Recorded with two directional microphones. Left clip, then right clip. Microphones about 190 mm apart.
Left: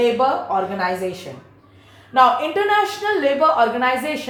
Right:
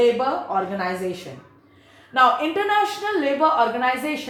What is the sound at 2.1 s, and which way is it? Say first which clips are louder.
Speech: left 3 dB; 20° right (ahead or behind).